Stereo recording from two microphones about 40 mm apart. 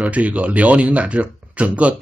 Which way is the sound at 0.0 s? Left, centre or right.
Right.